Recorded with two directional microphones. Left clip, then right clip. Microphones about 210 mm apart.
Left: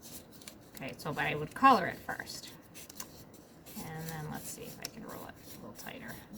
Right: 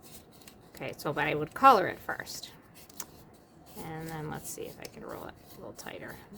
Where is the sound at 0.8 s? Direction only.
55° right (ahead or behind).